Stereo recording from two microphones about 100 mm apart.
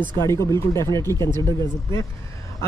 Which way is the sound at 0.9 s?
40° right (ahead or behind).